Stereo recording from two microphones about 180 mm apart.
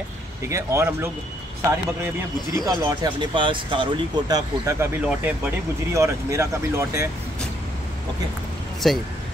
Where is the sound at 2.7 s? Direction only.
20° right (ahead or behind).